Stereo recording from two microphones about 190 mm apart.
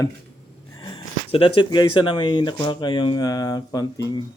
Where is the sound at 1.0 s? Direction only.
30° left (ahead or behind).